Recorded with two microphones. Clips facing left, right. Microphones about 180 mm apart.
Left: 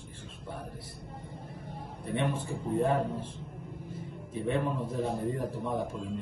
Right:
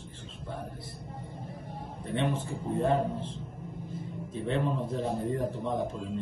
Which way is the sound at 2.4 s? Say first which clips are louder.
Left 1 dB; 10° left (ahead or behind).